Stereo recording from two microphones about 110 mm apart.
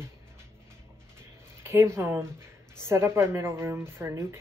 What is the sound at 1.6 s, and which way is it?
Speech, 25° right (ahead or behind).